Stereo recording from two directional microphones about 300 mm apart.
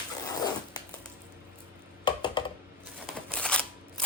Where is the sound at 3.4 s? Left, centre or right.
Centre.